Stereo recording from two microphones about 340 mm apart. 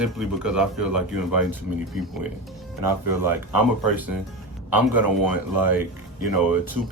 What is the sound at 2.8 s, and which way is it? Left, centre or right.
Speech, right.